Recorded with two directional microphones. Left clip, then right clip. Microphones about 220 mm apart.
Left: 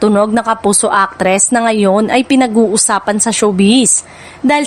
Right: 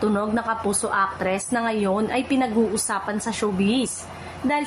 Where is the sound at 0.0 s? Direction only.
45° left (ahead or behind).